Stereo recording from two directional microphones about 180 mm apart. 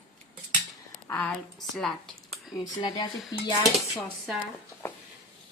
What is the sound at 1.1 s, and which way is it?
Speech, 10° left (ahead or behind).